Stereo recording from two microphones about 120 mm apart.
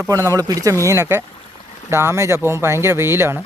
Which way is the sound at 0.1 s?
25° right (ahead or behind).